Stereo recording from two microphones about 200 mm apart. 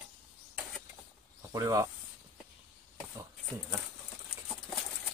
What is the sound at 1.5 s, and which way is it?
Speech, 15° right (ahead or behind).